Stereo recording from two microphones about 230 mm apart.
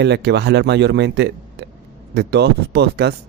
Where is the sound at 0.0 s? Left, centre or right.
Right.